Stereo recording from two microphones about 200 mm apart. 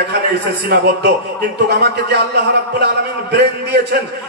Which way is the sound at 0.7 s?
55° right (ahead or behind).